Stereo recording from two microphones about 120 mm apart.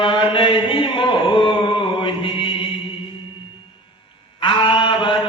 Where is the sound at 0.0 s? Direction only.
45° left (ahead or behind).